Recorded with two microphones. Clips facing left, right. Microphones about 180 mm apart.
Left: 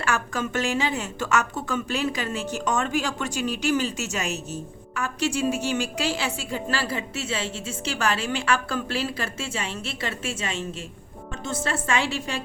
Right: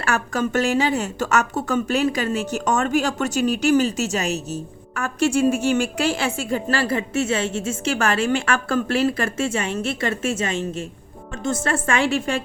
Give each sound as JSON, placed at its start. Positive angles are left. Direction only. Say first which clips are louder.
{"t": 0.1, "sound": "a woman's voice", "louder": "right 6 dB", "side_deg": -40}